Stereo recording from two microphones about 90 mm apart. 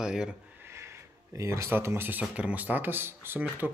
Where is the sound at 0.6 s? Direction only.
30° right (ahead or behind).